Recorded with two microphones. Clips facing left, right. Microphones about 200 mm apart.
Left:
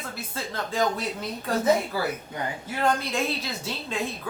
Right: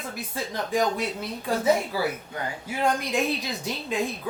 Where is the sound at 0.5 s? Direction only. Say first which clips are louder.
Right 1 dB; 15° right (ahead or behind).